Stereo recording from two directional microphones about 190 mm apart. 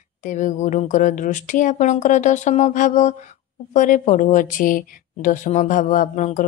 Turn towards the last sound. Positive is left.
turn(degrees=40)  # may be behind; listen again after turning